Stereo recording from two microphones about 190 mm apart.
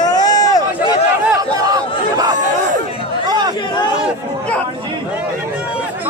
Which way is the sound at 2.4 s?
40° right (ahead or behind).